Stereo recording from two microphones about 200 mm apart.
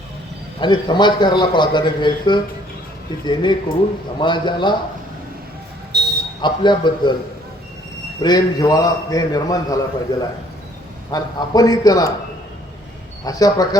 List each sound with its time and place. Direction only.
0.6 s a man's voice: 20° left (ahead or behind)
5.9 s a sound: 55° right (ahead or behind)
6.4 s a man's voice: 20° left (ahead or behind)
8.2 s a man's voice: 20° left (ahead or behind)
13.2 s a man's voice: 20° left (ahead or behind)